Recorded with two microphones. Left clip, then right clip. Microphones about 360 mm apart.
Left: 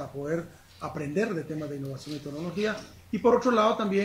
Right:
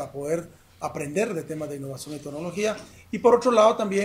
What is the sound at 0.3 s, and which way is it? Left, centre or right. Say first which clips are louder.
Speech: right 4 dB; centre.